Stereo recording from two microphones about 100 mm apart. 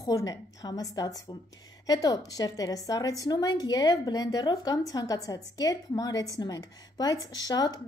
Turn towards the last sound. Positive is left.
turn(degrees=40)  # may be behind; listen again after turning